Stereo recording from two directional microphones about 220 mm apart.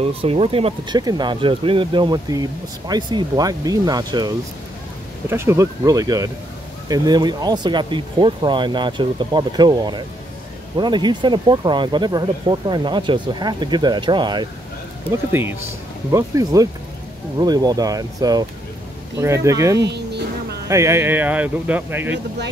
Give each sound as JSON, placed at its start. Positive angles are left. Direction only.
{"t": 0.2, "sound": "speech", "side_deg": -25}
{"t": 5.3, "sound": "speech", "side_deg": -10}